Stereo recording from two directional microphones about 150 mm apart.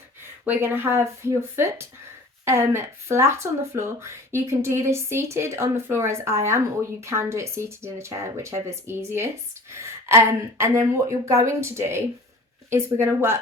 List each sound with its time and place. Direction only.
0.4 s speech: 15° right (ahead or behind)